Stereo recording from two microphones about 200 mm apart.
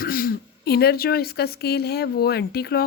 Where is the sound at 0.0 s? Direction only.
45° left (ahead or behind).